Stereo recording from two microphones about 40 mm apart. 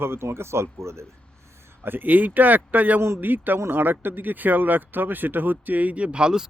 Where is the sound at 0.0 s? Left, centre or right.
Right.